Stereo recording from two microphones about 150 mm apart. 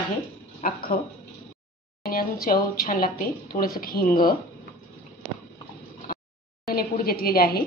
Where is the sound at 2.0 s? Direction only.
85° left.